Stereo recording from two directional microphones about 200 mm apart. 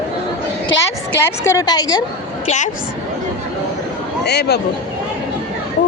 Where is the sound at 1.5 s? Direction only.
15° left (ahead or behind).